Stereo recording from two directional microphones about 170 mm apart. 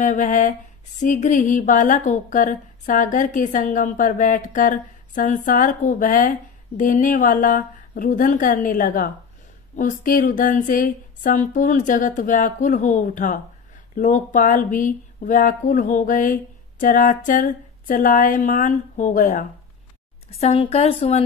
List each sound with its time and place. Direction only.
0.0 s speech: 50° left (ahead or behind)
20.2 s a woman's voice: 35° left (ahead or behind)